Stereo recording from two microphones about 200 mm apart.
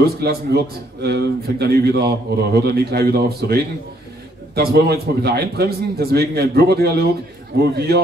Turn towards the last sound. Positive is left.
turn(degrees=-55)  # may be behind; listen again after turning